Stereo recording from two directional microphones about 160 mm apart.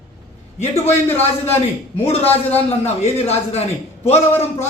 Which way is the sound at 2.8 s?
40° left (ahead or behind).